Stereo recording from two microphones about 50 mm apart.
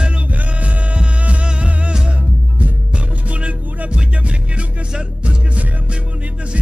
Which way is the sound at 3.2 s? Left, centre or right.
Right.